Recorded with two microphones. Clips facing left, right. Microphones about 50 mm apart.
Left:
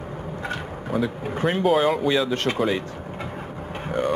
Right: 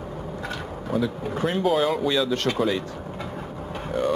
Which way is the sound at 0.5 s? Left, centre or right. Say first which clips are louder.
Left 1 dB; left.